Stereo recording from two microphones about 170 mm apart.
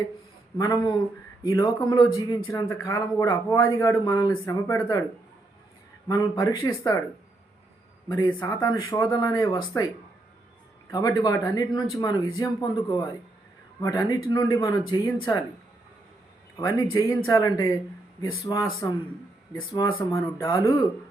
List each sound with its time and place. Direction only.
0.5 s speech: 20° left (ahead or behind)
6.1 s speech: 20° left (ahead or behind)
8.0 s speech: 15° left (ahead or behind)
10.9 s speech: 20° left (ahead or behind)
16.6 s speech: 20° left (ahead or behind)
20.0 s speech: 15° left (ahead or behind)